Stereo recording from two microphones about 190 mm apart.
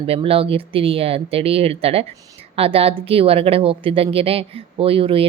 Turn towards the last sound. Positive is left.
turn(degrees=-30)  # may be behind; listen again after turning